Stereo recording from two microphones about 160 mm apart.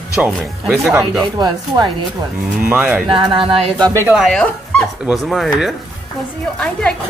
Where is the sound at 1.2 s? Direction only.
30° right (ahead or behind).